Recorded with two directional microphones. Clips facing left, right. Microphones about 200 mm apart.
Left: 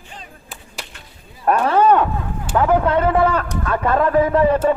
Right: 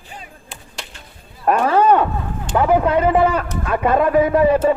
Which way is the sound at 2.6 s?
10° right (ahead or behind).